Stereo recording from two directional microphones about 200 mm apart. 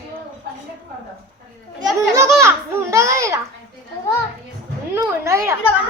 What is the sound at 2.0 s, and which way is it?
A child's voice, 15° right (ahead or behind).